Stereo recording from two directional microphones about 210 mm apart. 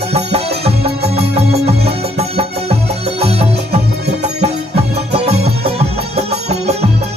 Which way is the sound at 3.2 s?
30° right (ahead or behind).